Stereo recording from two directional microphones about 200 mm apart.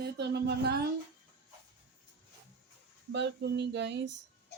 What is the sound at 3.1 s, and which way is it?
Speech, 60° right (ahead or behind).